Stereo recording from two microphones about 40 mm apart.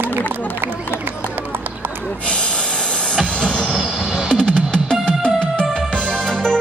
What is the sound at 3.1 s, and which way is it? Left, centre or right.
Music, centre.